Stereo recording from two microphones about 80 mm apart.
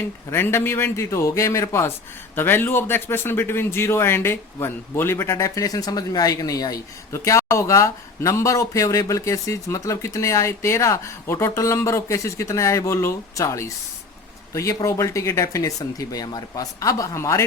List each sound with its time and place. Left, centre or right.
0.3 s a man's voice: left